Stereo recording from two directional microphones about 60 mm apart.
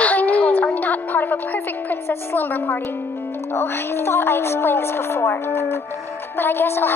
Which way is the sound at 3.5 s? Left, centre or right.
Left.